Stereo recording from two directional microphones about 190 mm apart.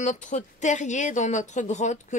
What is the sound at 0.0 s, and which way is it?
Speech, 40° left (ahead or behind).